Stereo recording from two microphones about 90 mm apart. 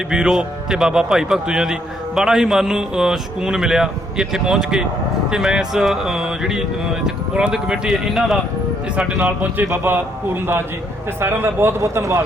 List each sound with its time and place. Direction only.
0.1 s a man's voice: 5° right (ahead or behind)
9.2 s a man's voice: 20° right (ahead or behind)